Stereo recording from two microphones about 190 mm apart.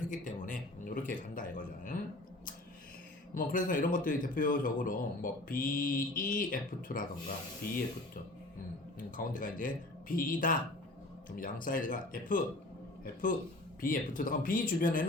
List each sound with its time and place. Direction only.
0.1 s a sound: 45° left (ahead or behind)
3.3 s a man's voice: 45° left (ahead or behind)
13.8 s a man's voice: 45° left (ahead or behind)